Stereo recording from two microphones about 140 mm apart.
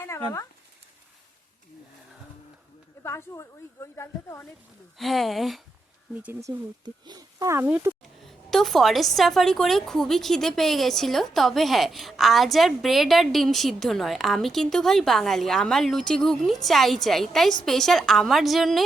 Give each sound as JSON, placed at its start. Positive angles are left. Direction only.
{"t": 0.0, "sound": "speech", "side_deg": 20}
{"t": 3.0, "sound": "speech", "side_deg": 20}
{"t": 4.9, "sound": "a woman's voice", "side_deg": 0}
{"t": 6.4, "sound": "speech", "side_deg": -30}
{"t": 8.2, "sound": "a woman's voice", "side_deg": 0}